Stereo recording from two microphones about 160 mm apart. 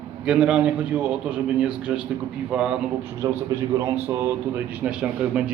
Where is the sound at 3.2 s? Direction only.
20° right (ahead or behind).